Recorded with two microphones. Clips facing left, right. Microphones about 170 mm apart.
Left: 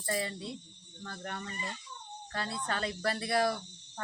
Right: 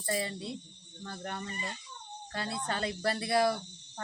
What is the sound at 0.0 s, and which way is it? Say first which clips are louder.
Speech: right 1 dB; 30° right (ahead or behind).